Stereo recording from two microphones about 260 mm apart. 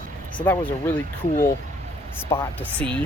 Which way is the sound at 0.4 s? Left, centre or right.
Centre.